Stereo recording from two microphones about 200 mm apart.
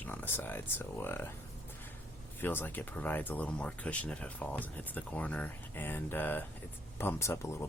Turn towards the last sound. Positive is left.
turn(degrees=10)  # may be behind; listen again after turning